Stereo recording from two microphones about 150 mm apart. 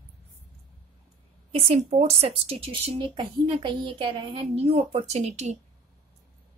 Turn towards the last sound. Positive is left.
turn(degrees=-45)  # may be behind; listen again after turning